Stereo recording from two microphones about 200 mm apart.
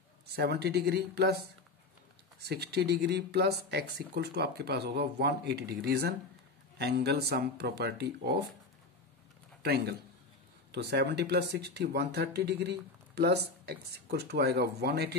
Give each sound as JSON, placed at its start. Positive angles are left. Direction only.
{"t": 0.4, "sound": "speech", "side_deg": -55}
{"t": 2.4, "sound": "speech", "side_deg": -55}
{"t": 9.6, "sound": "speech", "side_deg": -55}